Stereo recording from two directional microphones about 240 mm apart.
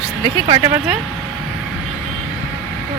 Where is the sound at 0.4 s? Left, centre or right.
Centre.